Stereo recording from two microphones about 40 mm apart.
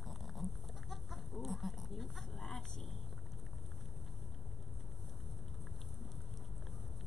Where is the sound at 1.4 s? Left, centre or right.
Centre.